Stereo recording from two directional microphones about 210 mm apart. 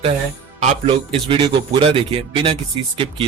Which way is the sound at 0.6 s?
30° right (ahead or behind).